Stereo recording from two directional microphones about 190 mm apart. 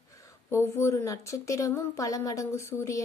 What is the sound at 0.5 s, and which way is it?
A woman's voice, 15° left (ahead or behind).